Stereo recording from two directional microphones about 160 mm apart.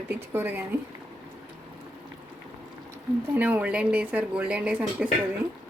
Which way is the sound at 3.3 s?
10° right (ahead or behind).